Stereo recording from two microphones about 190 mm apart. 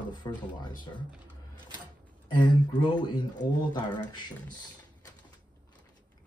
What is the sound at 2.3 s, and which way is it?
Speech, 25° left (ahead or behind).